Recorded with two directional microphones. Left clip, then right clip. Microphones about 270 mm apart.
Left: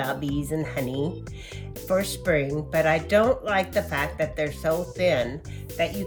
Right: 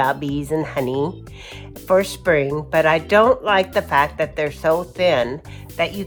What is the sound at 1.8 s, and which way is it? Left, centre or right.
Speech, right.